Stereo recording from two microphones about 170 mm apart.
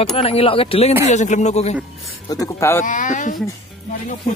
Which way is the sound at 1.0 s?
45° left (ahead or behind).